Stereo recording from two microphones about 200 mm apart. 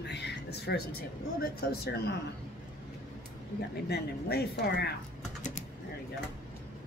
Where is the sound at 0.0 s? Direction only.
55° left (ahead or behind).